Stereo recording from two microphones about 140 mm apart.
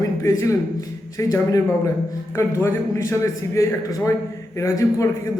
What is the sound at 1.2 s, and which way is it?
A man's voice, 25° left (ahead or behind).